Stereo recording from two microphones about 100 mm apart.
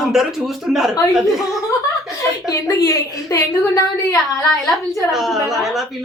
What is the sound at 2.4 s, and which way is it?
A woman's voice, 35° left (ahead or behind).